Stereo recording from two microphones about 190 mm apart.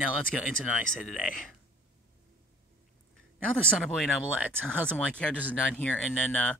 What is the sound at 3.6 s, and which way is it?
Speech, 5° left (ahead or behind).